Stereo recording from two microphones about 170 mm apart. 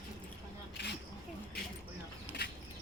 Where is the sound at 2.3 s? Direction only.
85° left.